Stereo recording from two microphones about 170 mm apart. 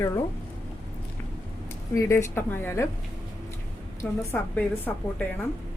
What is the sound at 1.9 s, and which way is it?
Speech, 15° left (ahead or behind).